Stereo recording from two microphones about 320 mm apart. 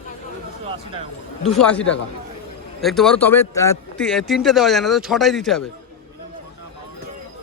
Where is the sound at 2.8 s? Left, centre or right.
Centre.